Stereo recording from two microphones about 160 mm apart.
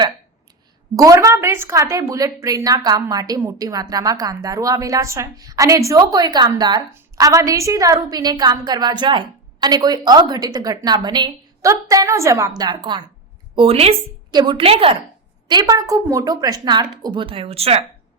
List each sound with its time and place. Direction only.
0.9 s a woman's voice: 20° right (ahead or behind)
13.6 s speech: 40° right (ahead or behind)
14.3 s speech: 25° right (ahead or behind)
15.4 s a woman's voice: 25° right (ahead or behind)